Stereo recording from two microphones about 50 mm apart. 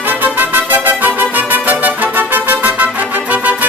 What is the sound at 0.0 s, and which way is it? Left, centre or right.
Music, right.